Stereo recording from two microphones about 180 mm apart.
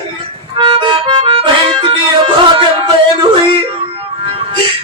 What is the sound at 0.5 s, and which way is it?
Music, 25° right (ahead or behind).